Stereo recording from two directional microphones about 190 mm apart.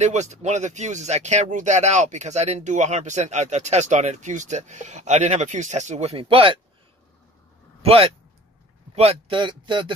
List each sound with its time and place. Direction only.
0.0 s speech: 35° right (ahead or behind)
7.8 s speech: 30° right (ahead or behind)